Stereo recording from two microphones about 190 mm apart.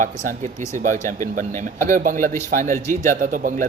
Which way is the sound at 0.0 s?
40° right (ahead or behind).